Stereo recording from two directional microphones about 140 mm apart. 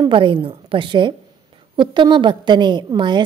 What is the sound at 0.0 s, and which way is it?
A woman's voice, 35° right (ahead or behind).